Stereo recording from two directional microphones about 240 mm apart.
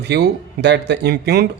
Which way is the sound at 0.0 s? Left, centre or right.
Right.